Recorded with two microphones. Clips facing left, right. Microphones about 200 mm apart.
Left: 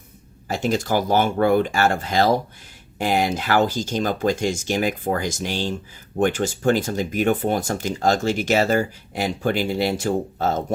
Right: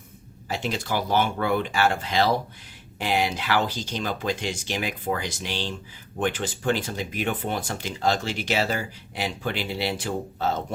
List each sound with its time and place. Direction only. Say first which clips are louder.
0.4 s speech: left 7 dB; 45° left (ahead or behind)